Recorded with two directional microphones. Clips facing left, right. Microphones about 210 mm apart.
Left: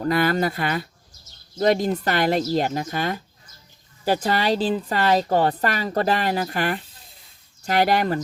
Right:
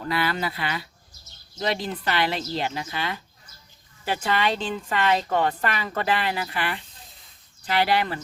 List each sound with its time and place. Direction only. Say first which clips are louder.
0.0 s a woman's voice: left 6 dB; 45° left (ahead or behind)